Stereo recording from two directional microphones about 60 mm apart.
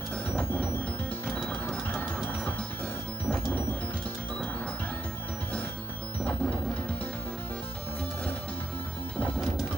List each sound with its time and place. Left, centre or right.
2.0 s music: left
6.2 s music: left